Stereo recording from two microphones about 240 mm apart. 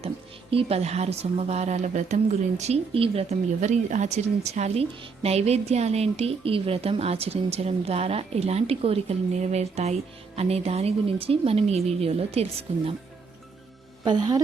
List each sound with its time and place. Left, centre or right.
0.5 s speech: right
14.0 s speech: centre